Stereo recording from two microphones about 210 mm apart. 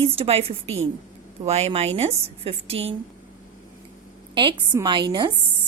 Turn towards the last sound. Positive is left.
turn(degrees=-20)  # may be behind; listen again after turning